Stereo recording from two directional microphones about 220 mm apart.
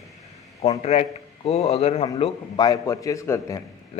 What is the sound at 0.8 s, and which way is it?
A man's voice, 30° left (ahead or behind).